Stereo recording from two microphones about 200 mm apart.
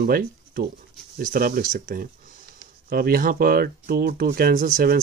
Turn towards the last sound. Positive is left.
turn(degrees=-45)  # may be behind; listen again after turning